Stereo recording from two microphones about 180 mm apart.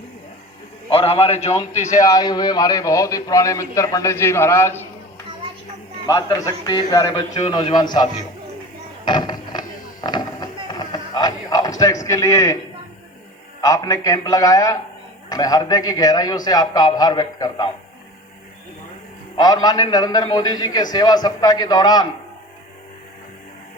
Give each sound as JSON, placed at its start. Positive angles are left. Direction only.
{"t": 0.9, "sound": "a man's voice", "side_deg": 30}
{"t": 2.0, "sound": "a man's voice", "side_deg": 20}
{"t": 6.1, "sound": "a man's voice", "side_deg": 20}
{"t": 9.0, "sound": "a sound", "side_deg": 25}
{"t": 12.0, "sound": "a man's voice", "side_deg": 15}
{"t": 13.6, "sound": "a man's voice", "side_deg": 20}
{"t": 19.4, "sound": "a man's voice", "side_deg": 20}